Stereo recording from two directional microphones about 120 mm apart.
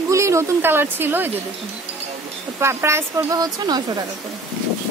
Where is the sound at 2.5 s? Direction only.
20° right (ahead or behind).